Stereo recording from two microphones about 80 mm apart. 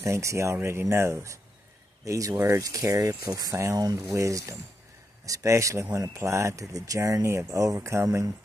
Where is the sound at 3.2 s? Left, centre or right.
Right.